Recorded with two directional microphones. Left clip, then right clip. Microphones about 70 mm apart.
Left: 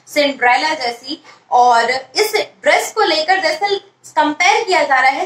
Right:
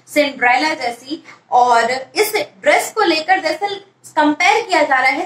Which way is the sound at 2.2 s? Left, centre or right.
Left.